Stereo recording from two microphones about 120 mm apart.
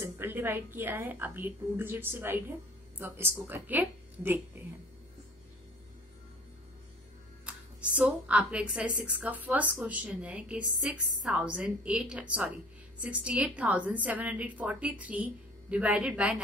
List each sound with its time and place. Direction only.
0.0 s speech: 15° right (ahead or behind)
7.4 s speech: 10° right (ahead or behind)